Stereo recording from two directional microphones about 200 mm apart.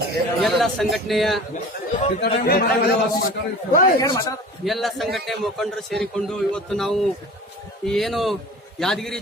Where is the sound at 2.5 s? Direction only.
50° left (ahead or behind).